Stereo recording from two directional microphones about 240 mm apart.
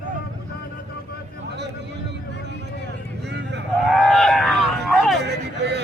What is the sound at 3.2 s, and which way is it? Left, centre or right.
Vehicle, right.